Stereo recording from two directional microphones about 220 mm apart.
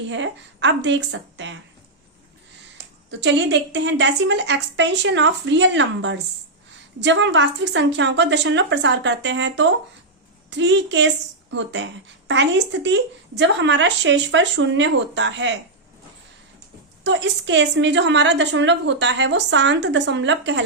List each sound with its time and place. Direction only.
0.1 s a woman's voice: 55° right (ahead or behind)
3.1 s a woman's voice: 55° right (ahead or behind)
17.0 s a woman's voice: 55° right (ahead or behind)